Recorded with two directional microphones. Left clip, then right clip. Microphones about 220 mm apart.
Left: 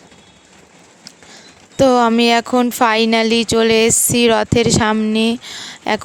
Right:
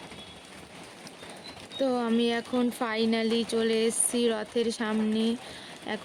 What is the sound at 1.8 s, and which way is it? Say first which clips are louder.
Speech: left 15 dB; 45° left (ahead or behind).